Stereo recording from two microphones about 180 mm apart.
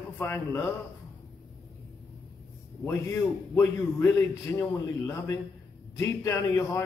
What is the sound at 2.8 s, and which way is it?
A man's voice, 15° left (ahead or behind).